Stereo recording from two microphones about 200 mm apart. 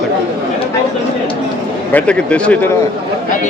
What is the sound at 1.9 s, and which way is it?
Speech, 5° left (ahead or behind).